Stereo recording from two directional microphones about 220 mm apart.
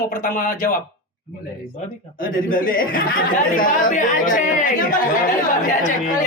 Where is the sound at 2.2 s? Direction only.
40° left (ahead or behind).